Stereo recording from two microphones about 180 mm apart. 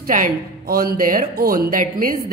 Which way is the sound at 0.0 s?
50° right (ahead or behind).